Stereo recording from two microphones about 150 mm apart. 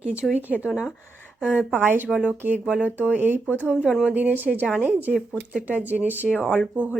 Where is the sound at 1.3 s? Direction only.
5° right (ahead or behind).